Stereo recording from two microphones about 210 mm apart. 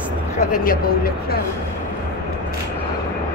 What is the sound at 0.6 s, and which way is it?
Speech, 45° left (ahead or behind).